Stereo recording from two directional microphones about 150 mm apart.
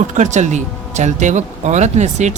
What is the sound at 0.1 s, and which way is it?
Speech, 55° right (ahead or behind).